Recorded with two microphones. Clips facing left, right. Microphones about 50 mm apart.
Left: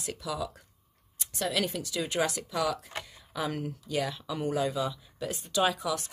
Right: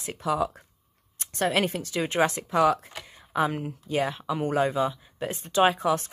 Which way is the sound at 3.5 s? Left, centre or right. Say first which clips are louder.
Right 3 dB; right.